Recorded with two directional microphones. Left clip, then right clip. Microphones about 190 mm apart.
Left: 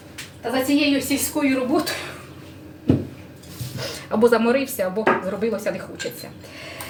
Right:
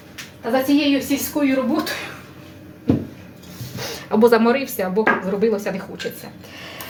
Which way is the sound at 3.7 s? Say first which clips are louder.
Right 3 dB; 25° right (ahead or behind).